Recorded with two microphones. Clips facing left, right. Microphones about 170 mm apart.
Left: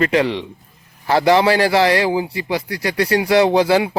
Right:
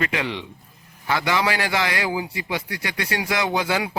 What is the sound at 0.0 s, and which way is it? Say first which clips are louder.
A man's voice: left 9 dB; 35° left (ahead or behind).